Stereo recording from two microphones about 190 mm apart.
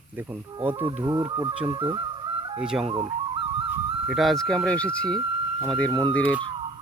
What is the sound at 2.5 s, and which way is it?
Speech, 5° right (ahead or behind).